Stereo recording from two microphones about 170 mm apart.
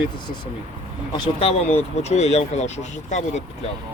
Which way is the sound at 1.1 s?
30° left (ahead or behind).